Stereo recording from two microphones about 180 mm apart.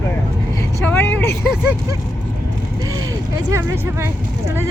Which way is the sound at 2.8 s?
20° right (ahead or behind).